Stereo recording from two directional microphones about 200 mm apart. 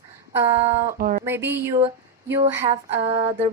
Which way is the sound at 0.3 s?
10° right (ahead or behind).